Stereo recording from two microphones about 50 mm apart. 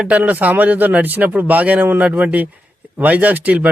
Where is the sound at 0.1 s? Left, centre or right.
Right.